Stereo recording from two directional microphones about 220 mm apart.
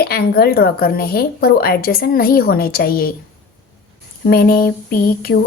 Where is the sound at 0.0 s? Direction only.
45° left (ahead or behind).